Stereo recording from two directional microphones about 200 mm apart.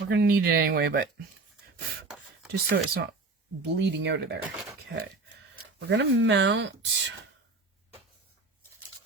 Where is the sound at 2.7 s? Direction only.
50° right (ahead or behind).